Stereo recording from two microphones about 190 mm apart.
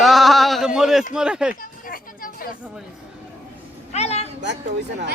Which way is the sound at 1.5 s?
50° left (ahead or behind).